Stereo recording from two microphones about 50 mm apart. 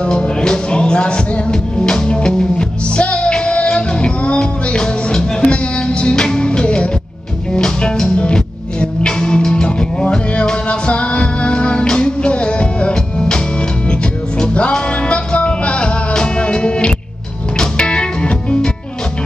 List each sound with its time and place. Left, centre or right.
0.0 s music: centre
14.4 s music: left